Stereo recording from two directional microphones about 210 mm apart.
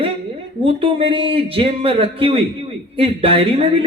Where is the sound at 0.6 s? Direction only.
25° right (ahead or behind).